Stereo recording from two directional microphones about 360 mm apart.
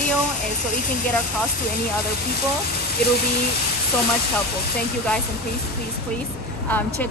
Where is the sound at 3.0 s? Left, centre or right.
Left.